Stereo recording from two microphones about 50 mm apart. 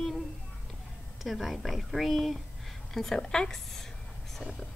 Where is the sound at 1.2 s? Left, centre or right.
Centre.